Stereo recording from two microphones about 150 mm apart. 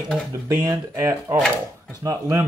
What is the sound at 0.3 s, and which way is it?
Speech, 20° right (ahead or behind).